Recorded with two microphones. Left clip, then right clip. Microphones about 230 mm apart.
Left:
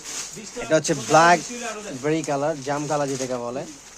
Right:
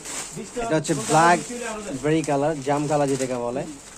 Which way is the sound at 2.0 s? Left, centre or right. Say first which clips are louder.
Right 1 dB; left.